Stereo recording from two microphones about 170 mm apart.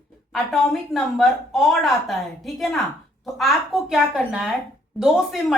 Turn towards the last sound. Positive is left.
turn(degrees=0)  # may be behind; listen again after turning